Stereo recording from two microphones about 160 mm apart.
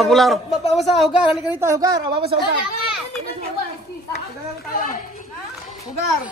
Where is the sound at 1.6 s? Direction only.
20° right (ahead or behind).